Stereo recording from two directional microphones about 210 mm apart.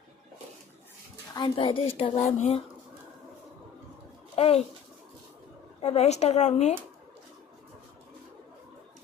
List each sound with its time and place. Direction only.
1.3 s a woman's voice: 25° left (ahead or behind)
4.4 s speech: 30° left (ahead or behind)
5.8 s speech: 30° left (ahead or behind)